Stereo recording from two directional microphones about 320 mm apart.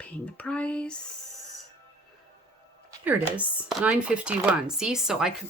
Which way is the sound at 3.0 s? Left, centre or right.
Centre.